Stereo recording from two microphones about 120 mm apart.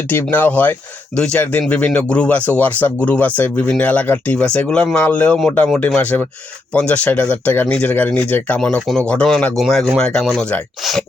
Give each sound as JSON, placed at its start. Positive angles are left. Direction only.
{"t": 0.1, "sound": "speech", "side_deg": 15}